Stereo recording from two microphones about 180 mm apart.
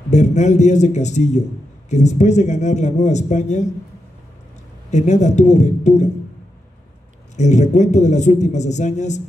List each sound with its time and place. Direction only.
0.1 s a man's voice: 40° left (ahead or behind)
4.9 s a man's voice: 40° left (ahead or behind)
7.3 s a man's voice: 40° left (ahead or behind)